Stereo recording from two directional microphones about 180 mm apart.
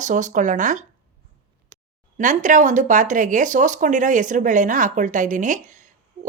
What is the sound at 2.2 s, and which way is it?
Speech, 45° right (ahead or behind).